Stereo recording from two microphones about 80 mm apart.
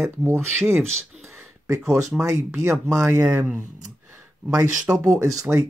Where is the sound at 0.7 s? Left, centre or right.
Right.